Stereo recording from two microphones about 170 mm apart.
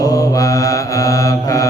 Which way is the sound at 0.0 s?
20° left (ahead or behind).